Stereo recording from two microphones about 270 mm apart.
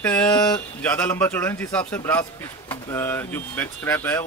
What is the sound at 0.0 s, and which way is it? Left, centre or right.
Speech, centre.